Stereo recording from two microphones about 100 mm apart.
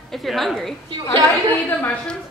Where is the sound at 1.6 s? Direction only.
20° left (ahead or behind).